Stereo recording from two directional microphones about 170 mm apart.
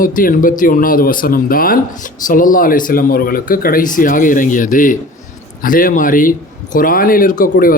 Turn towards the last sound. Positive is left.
turn(degrees=55)  # may be behind; listen again after turning